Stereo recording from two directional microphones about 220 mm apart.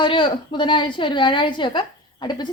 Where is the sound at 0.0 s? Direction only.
20° left (ahead or behind).